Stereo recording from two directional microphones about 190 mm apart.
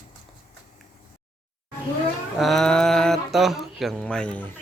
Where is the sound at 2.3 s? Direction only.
Centre (ahead or behind).